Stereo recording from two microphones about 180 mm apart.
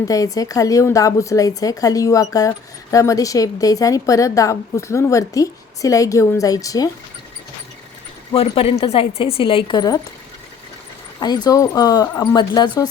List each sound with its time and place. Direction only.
0.1 s a woman's voice: 20° left (ahead or behind)
8.3 s a woman's voice: 30° left (ahead or behind)
11.2 s a woman's voice: 25° left (ahead or behind)